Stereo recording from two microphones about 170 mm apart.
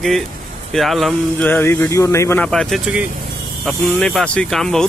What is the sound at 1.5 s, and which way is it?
Speech, 10° left (ahead or behind).